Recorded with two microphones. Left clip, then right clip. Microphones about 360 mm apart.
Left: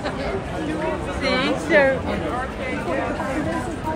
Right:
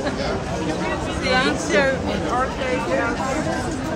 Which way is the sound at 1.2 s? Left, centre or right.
Left.